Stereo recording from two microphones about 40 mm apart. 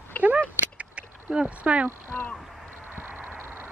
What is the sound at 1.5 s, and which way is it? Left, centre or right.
Speech, right.